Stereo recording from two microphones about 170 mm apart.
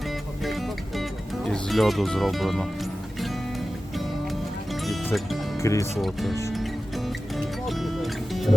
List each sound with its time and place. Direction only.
0.4 s music: centre (ahead or behind)
1.5 s speech: 5° left (ahead or behind)
3.9 s music: centre (ahead or behind)
5.5 s speech: 15° left (ahead or behind)
6.0 s speech: centre (ahead or behind)
6.5 s music: centre (ahead or behind)